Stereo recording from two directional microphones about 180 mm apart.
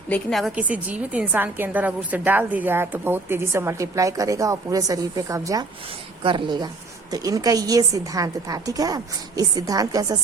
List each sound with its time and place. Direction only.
0.1 s a woman's voice: centre (ahead or behind); by 10.2 s 20° right (ahead or behind)